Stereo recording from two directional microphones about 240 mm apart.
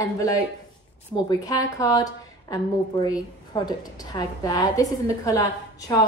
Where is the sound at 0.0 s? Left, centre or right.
Centre.